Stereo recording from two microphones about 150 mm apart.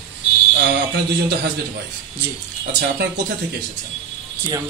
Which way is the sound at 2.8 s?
90° right.